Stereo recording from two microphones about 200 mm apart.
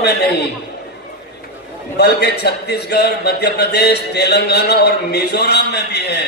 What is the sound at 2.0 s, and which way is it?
A man's voice, 55° left (ahead or behind).